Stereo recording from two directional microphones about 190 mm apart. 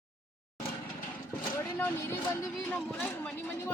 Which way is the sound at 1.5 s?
10° left (ahead or behind).